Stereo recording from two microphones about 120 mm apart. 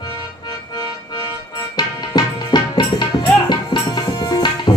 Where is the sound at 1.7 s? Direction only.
35° left (ahead or behind).